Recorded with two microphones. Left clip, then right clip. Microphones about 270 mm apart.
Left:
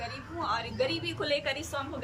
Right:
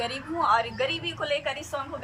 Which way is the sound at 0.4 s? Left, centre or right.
Centre.